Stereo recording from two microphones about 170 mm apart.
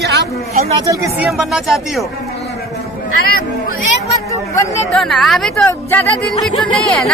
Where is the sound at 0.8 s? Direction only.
15° right (ahead or behind).